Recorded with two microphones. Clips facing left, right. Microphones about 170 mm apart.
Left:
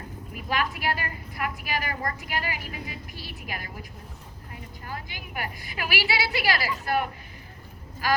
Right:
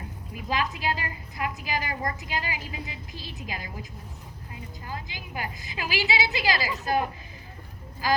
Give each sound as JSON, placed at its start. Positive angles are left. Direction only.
{"t": 0.3, "sound": "a woman's voice", "side_deg": -20}
{"t": 5.6, "sound": "a woman's voice", "side_deg": -20}